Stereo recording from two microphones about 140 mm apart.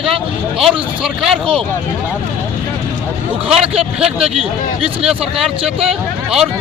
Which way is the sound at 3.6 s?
45° right (ahead or behind).